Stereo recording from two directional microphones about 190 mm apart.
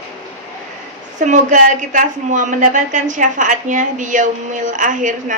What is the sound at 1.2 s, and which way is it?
A woman's voice, 40° right (ahead or behind).